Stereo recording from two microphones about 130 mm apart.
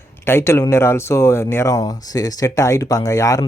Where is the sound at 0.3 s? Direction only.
20° left (ahead or behind).